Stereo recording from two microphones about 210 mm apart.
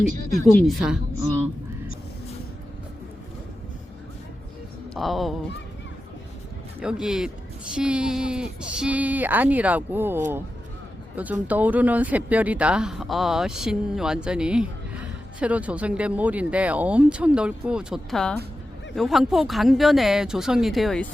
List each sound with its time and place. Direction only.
0.6 s speech: centre (ahead or behind)
4.9 s speech: centre (ahead or behind)
6.8 s speech: 5° right (ahead or behind)